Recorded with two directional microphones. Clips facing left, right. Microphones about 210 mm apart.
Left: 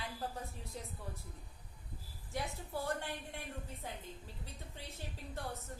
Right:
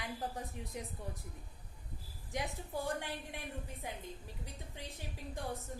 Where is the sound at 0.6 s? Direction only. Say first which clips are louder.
Right 3 dB; 15° right (ahead or behind).